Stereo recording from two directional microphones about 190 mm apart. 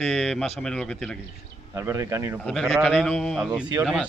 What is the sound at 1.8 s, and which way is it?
Speech, 15° right (ahead or behind).